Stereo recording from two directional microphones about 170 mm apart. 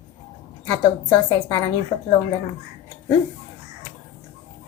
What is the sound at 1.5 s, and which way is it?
Speech, 20° left (ahead or behind).